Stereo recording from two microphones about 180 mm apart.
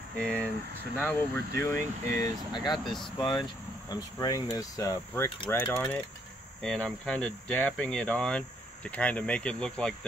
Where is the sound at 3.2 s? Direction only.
25° left (ahead or behind).